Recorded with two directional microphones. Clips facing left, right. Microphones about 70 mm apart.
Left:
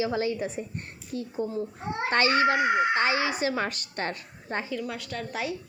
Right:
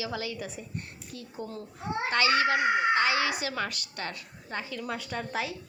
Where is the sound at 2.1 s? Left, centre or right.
Left.